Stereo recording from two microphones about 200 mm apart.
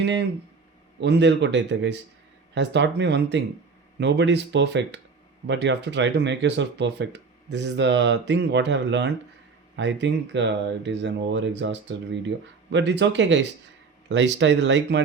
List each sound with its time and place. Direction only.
0.0 s speech: 60° right (ahead or behind)